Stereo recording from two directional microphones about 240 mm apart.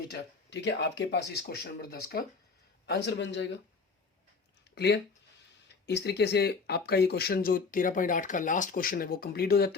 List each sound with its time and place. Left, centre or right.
0.1 s speech: left
4.7 s speech: left